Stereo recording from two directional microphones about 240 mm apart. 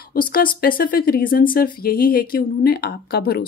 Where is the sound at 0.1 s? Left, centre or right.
Left.